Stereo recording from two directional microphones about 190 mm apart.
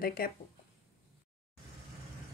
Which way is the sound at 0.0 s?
50° left (ahead or behind).